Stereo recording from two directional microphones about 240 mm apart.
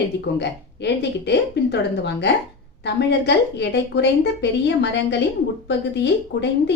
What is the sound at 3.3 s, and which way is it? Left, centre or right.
A woman's voice, left.